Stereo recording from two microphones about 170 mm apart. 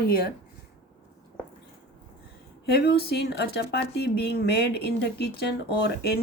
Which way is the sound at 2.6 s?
70° left (ahead or behind).